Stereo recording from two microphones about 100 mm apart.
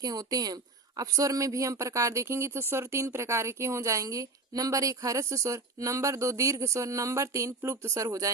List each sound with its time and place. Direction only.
0.0 s speech: 40° right (ahead or behind)